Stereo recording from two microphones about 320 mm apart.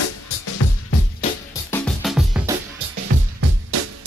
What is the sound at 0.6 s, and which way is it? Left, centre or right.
Music, left.